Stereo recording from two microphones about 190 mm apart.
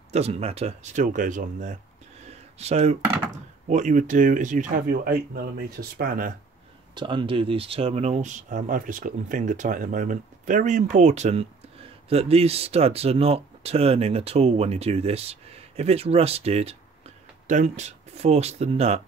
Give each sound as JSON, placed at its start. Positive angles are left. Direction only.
{"t": 0.1, "sound": "speech", "side_deg": -35}
{"t": 2.2, "sound": "a sound", "side_deg": -35}
{"t": 3.6, "sound": "speech", "side_deg": -40}
{"t": 7.0, "sound": "speech", "side_deg": -25}